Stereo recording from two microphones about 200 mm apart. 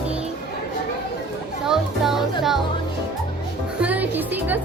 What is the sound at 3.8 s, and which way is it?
Music, 10° right (ahead or behind).